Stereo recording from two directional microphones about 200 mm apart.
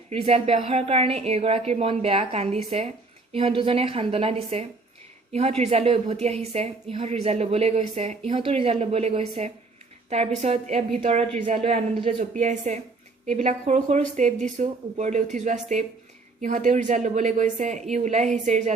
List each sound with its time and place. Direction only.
0.1 s a woman's voice: 30° right (ahead or behind)